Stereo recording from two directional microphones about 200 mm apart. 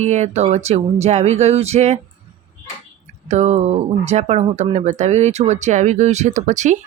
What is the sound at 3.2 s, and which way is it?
Speech, 35° right (ahead or behind).